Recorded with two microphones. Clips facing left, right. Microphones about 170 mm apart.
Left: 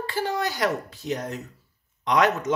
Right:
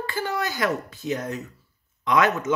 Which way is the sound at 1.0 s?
5° right (ahead or behind).